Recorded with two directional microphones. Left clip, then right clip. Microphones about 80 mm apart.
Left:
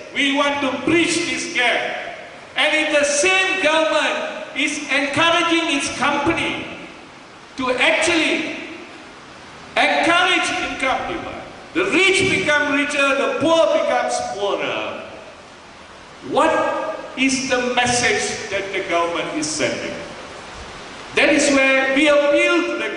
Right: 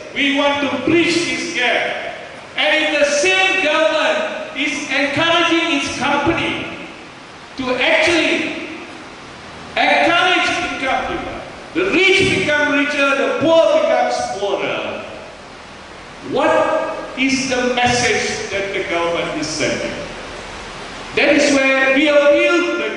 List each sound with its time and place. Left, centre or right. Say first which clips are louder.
0.1 s a man's voice: right 2 dB; left
4.6 s music: right 1 dB; left
7.5 s a man's voice: right 2 dB; left
9.8 s a sound: right 2 dB; left
17.2 s a man's voice: right 2 dB; left
21.1 s a man's voice: right 2 dB; left